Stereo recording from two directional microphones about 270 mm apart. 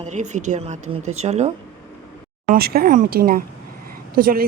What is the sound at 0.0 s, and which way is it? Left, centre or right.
Speech, right.